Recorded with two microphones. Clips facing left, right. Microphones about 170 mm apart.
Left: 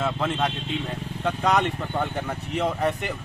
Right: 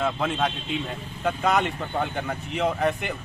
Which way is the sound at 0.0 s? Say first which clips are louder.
Even; centre (ahead or behind).